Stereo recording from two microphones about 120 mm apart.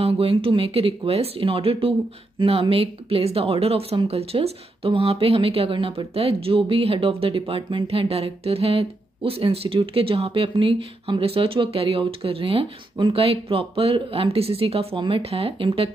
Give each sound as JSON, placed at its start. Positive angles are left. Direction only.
{"t": 0.0, "sound": "speech", "side_deg": -50}